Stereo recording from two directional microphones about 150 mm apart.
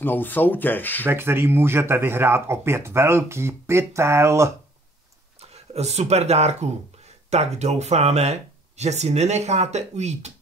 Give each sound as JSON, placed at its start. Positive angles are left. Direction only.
{"t": 0.0, "sound": "speech", "side_deg": 15}
{"t": 1.0, "sound": "speech", "side_deg": -15}
{"t": 5.4, "sound": "speech", "side_deg": -45}